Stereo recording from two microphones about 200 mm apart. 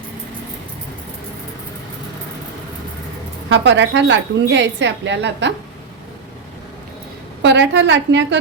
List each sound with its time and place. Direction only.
3.5 s a woman's voice: 60° right (ahead or behind)
7.4 s a woman's voice: 60° right (ahead or behind)